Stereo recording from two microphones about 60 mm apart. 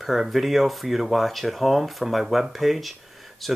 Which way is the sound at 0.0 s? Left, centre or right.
Centre.